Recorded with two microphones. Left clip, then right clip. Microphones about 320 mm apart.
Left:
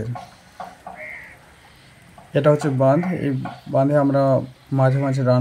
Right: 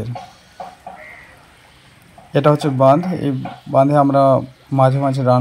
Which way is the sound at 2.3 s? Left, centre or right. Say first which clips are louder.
Right 3 dB; right.